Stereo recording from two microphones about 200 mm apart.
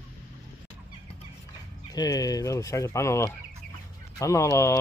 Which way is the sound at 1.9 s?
20° left (ahead or behind).